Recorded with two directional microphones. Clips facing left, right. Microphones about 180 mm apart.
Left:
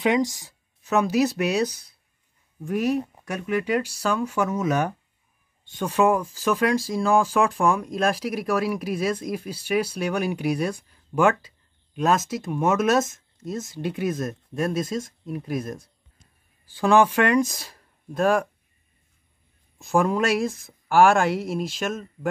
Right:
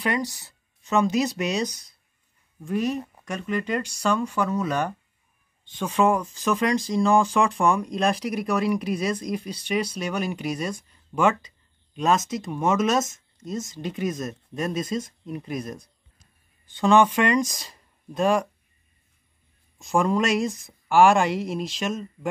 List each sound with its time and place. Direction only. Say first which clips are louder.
0.0 s speech: left 5 dB; 15° left (ahead or behind)
16.8 s speech: even; 5° left (ahead or behind)
19.8 s speech: left 1 dB; 5° left (ahead or behind)